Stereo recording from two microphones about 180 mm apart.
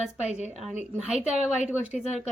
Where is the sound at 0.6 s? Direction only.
Centre (ahead or behind).